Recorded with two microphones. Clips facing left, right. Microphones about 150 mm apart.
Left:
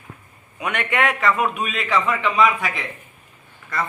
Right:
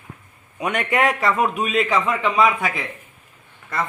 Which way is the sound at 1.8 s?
20° right (ahead or behind).